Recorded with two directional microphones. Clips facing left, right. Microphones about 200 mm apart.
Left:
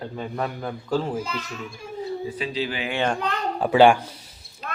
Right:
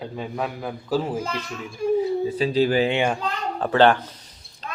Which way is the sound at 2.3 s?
40° right (ahead or behind).